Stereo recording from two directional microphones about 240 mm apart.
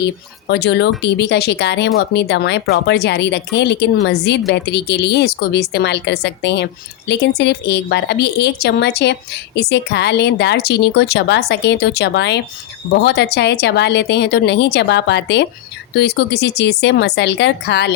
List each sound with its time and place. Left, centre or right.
0.0 s a woman's voice: left